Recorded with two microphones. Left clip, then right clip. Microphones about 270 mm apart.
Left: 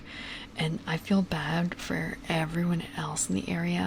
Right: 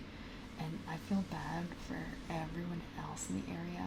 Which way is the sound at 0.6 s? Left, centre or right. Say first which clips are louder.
Left 13 dB; left.